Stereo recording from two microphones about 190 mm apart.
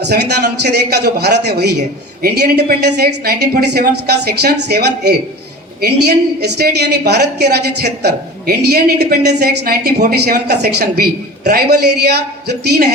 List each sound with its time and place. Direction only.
0.0 s a woman's voice: 60° right (ahead or behind)